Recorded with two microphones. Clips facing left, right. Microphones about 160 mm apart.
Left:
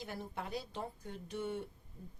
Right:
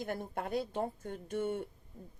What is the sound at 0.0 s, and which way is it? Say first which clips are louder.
Speech: right 6 dB; 55° right (ahead or behind).